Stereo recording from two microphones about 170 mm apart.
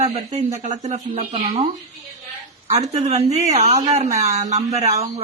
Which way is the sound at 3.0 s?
40° right (ahead or behind).